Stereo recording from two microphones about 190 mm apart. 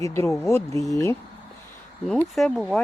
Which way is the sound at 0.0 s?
15° left (ahead or behind).